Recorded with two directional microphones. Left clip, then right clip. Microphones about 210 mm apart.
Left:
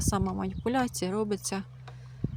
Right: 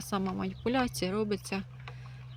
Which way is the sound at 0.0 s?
20° left (ahead or behind).